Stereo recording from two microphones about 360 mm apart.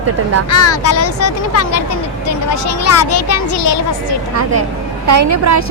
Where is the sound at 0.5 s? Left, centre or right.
Left.